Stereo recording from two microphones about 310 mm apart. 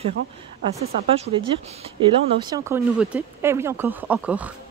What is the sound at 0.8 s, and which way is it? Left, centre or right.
Speech, centre.